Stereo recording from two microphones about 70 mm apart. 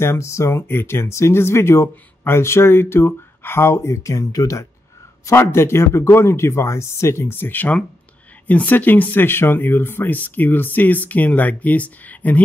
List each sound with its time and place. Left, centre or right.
0.0 s speech: left
0.6 s speech: left
5.2 s speech: left